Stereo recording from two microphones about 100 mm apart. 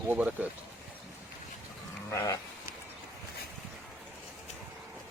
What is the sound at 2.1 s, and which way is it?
Sheep, 30° left (ahead or behind).